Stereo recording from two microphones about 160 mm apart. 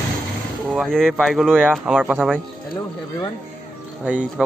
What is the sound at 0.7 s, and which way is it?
Speech, 5° left (ahead or behind).